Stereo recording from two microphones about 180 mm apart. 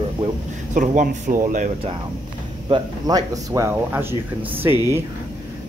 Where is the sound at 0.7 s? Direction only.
45° right (ahead or behind).